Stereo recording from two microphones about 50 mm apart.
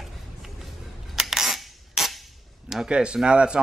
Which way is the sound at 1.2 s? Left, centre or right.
Centre.